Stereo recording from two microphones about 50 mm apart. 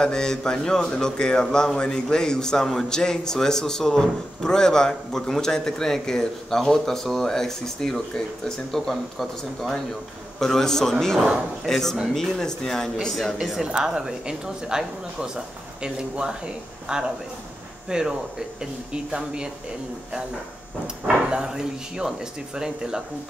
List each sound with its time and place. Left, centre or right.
0.0 s a man's voice: centre
13.1 s a woman's voice: centre
21.3 s a woman's voice: centre